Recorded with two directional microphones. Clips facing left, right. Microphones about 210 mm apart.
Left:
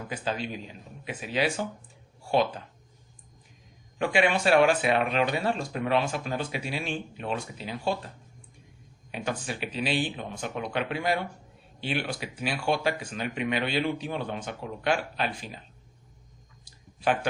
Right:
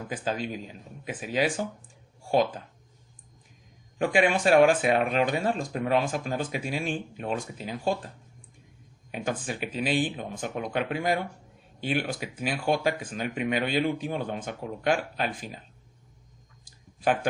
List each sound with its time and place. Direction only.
0.1 s speech: 45° right (ahead or behind)
3.9 s speech: 45° right (ahead or behind)
9.1 s speech: 45° right (ahead or behind)
16.6 s a sound: 45° right (ahead or behind)